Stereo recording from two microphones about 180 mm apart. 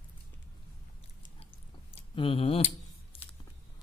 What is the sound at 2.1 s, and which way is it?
Speech, 30° left (ahead or behind).